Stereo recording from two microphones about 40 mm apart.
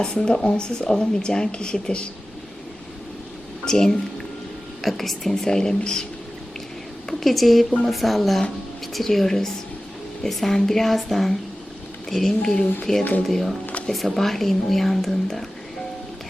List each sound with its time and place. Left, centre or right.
0.3 s speech: left
3.7 s speech: centre
4.8 s a woman's voice: centre
5.5 s speech: centre
7.1 s a woman's voice: centre